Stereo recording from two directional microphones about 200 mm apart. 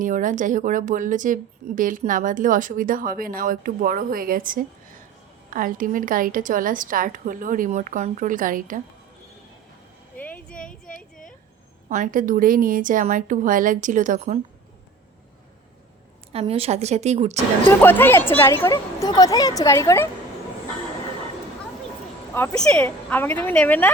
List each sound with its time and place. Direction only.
0.0 s a woman's voice: 40° right (ahead or behind)
10.2 s a sound: 10° left (ahead or behind)
11.9 s a woman's voice: 40° right (ahead or behind)
16.3 s a woman's voice: 30° right (ahead or behind)
17.7 s a woman's voice: 10° left (ahead or behind)
22.4 s a woman's voice: 5° left (ahead or behind)